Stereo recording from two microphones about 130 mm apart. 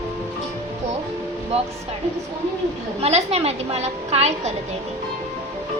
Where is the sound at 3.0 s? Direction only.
55° right (ahead or behind).